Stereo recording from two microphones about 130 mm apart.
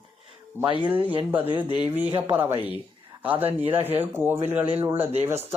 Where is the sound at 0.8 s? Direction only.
10° right (ahead or behind).